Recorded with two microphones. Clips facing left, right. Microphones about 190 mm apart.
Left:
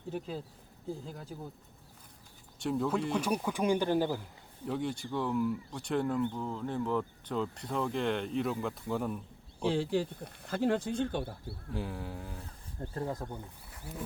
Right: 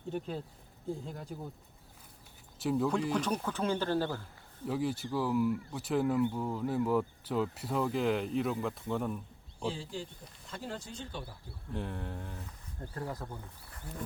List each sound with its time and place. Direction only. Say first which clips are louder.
0.1 s speech: right 1 dB; centre (ahead or behind)
2.6 s speech: right 1 dB; centre (ahead or behind); by 4.3 s 15° left (ahead or behind)
4.6 s a man's voice: right 1 dB; 5° right (ahead or behind)
9.6 s speech: left 8 dB; 70° left (ahead or behind)
11.7 s speech: even; 5° left (ahead or behind)
12.8 s speech: left 3 dB; 25° left (ahead or behind)
13.3 s speech: left 2 dB; 10° left (ahead or behind)